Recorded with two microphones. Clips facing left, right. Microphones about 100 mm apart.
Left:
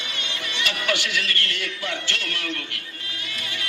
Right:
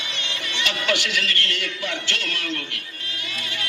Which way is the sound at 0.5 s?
20° right (ahead or behind).